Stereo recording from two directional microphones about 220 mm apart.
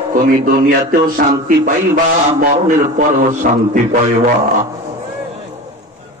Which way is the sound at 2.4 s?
35° right (ahead or behind).